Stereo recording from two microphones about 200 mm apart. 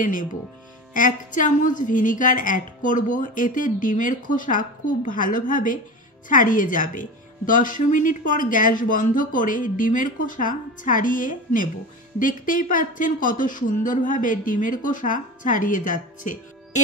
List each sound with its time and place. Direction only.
0.0 s speech: 40° left (ahead or behind)